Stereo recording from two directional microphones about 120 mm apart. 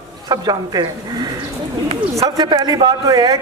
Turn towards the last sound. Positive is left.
turn(degrees=-30)  # may be behind; listen again after turning